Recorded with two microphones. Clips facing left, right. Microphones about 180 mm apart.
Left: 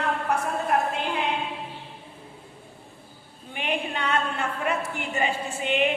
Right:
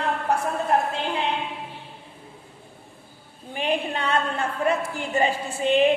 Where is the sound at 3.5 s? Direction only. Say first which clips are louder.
Right 4 dB; 35° right (ahead or behind).